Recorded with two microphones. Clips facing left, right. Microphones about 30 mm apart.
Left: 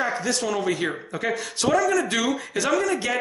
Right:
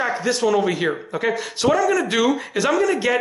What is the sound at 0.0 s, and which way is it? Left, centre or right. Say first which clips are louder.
A man's voice: right 5 dB; centre.